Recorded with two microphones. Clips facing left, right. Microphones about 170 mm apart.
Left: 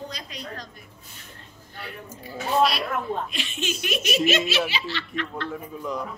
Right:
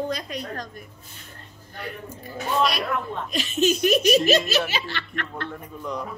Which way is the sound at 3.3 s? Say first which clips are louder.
Right 9 dB; 40° right (ahead or behind).